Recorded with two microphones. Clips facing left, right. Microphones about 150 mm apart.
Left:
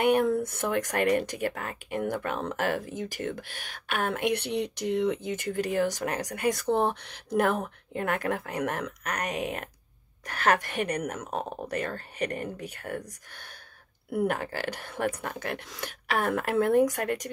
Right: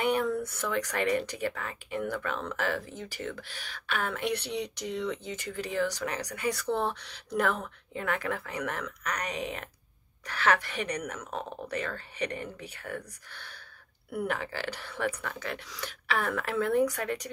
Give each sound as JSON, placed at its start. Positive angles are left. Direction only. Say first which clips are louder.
{"t": 0.0, "sound": "speech", "louder": "left 5 dB", "side_deg": 55}